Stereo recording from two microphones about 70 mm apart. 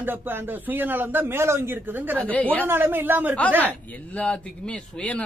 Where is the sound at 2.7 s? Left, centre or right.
Right.